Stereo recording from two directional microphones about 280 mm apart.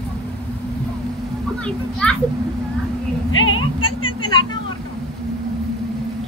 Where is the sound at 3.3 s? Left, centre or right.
Left.